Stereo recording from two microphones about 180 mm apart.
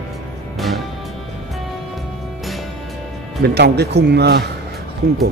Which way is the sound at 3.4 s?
65° right (ahead or behind).